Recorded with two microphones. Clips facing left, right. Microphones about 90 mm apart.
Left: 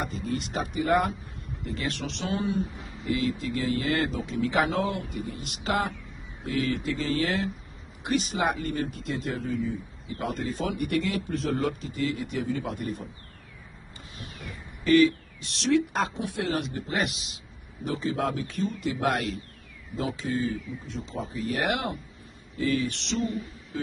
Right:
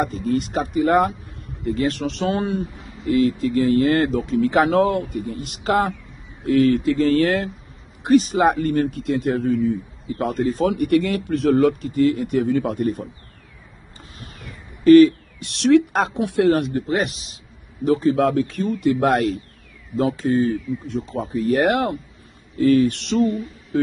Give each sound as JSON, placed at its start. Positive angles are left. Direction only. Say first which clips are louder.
{"t": 0.0, "sound": "speech", "louder": "right 9 dB", "side_deg": -50}
{"t": 2.3, "sound": "speech", "louder": "right 5 dB", "side_deg": -60}
{"t": 3.1, "sound": "speech", "louder": "right 9 dB", "side_deg": -45}
{"t": 6.4, "sound": "speech", "louder": "right 12 dB", "side_deg": -60}
{"t": 8.0, "sound": "speech", "louder": "right 11 dB", "side_deg": -40}
{"t": 10.3, "sound": "speech", "louder": "right 12 dB", "side_deg": -40}
{"t": 10.7, "sound": "speech", "louder": "right 9 dB", "side_deg": -55}
{"t": 14.1, "sound": "a sound", "louder": "right 1 dB", "side_deg": -40}
{"t": 14.9, "sound": "speech", "louder": "right 10 dB", "side_deg": -45}
{"t": 15.4, "sound": "speech", "louder": "right 9 dB", "side_deg": -60}
{"t": 16.8, "sound": "speech", "louder": "right 7 dB", "side_deg": -35}
{"t": 17.8, "sound": "speech", "louder": "right 11 dB", "side_deg": -50}